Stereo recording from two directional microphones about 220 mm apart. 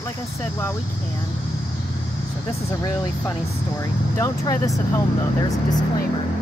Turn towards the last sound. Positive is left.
turn(degrees=15)  # may be behind; listen again after turning